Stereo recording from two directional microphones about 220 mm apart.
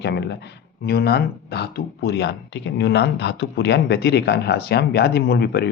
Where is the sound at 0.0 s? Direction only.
50° left (ahead or behind).